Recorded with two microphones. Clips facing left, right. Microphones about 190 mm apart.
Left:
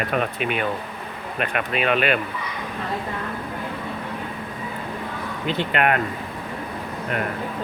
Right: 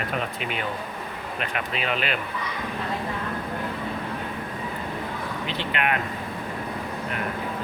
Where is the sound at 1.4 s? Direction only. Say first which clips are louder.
Left 6 dB; 60° left (ahead or behind).